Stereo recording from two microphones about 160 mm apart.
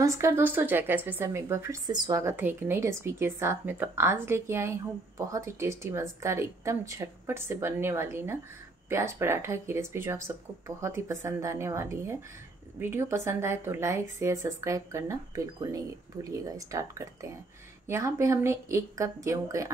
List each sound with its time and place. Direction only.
0.0 s a woman's voice: 20° right (ahead or behind)